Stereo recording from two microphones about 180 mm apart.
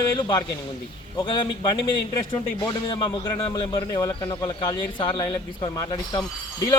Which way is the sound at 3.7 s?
20° left (ahead or behind).